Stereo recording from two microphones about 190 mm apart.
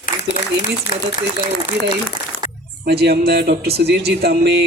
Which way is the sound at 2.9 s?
55° right (ahead or behind).